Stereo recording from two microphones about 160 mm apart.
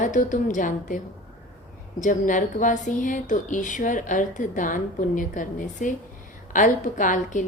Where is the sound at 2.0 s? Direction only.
55° left (ahead or behind).